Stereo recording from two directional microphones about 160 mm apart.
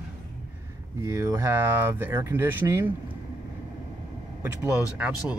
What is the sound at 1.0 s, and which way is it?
Speech, 20° right (ahead or behind).